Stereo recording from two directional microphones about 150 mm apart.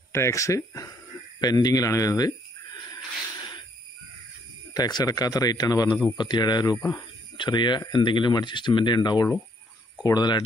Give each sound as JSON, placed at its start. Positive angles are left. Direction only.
{"t": 0.1, "sound": "speech", "side_deg": 20}
{"t": 4.7, "sound": "speech", "side_deg": 25}